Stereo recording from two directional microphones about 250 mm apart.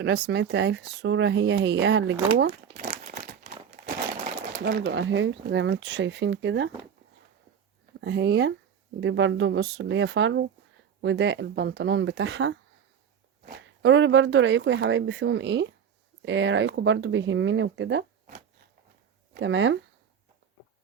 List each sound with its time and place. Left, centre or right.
0.3 s speech: right
2.7 s crumpling: right
8.0 s speech: right
19.3 s speech: right